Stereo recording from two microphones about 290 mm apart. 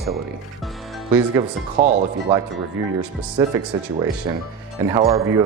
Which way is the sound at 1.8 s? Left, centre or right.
Right.